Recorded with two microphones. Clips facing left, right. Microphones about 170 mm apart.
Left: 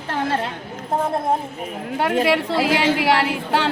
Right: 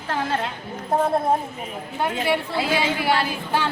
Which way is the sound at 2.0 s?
90° left.